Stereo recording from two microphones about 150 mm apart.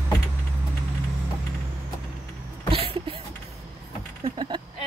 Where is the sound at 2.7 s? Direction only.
35° right (ahead or behind).